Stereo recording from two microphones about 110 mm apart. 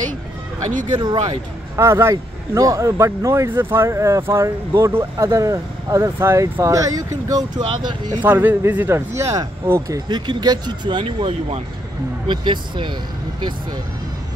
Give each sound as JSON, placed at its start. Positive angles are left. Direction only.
{"t": 0.9, "sound": "speech", "side_deg": -40}
{"t": 1.8, "sound": "speech", "side_deg": -25}
{"t": 8.2, "sound": "speech", "side_deg": -15}